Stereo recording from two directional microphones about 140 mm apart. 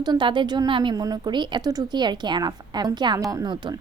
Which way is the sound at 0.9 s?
25° right (ahead or behind).